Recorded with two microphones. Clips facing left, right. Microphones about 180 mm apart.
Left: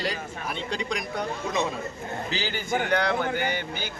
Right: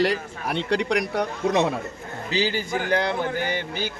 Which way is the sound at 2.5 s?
35° right (ahead or behind).